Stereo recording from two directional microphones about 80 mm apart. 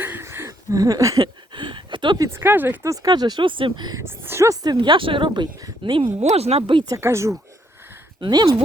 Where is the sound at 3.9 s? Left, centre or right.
Right.